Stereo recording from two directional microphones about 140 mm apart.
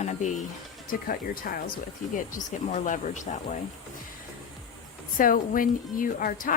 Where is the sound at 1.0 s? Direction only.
90° left.